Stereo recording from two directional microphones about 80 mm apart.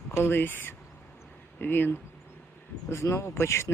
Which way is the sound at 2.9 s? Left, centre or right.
Left.